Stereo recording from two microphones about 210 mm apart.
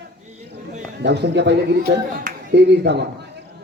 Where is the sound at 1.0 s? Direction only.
55° right (ahead or behind).